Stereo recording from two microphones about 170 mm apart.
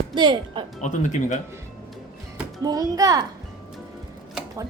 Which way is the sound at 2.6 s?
20° right (ahead or behind).